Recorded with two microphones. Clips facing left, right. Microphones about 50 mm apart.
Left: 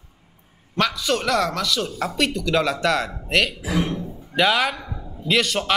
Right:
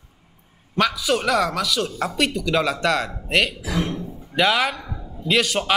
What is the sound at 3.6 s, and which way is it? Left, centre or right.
Speech, centre.